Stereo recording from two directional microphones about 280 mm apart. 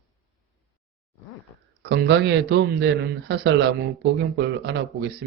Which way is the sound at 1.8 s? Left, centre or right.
Right.